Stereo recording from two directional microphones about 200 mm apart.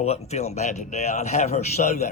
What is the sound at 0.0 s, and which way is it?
Speech, 35° left (ahead or behind).